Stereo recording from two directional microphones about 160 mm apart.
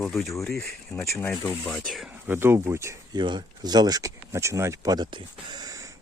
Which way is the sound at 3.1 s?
30° right (ahead or behind).